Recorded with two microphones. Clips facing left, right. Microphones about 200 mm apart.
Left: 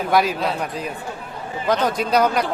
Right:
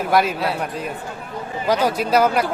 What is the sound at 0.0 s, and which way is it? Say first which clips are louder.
A man's voice: even; centre (ahead or behind).